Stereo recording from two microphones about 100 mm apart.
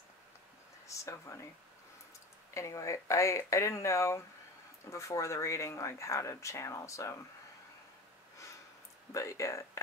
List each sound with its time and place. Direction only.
0.8 s speech: 30° left (ahead or behind)
2.5 s speech: 30° left (ahead or behind)
9.1 s speech: 30° left (ahead or behind)